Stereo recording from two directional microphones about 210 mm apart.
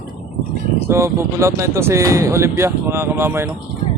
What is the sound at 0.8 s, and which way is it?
Speech, 15° right (ahead or behind).